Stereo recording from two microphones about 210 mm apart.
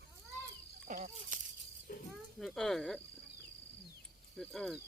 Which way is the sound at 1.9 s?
45° left (ahead or behind).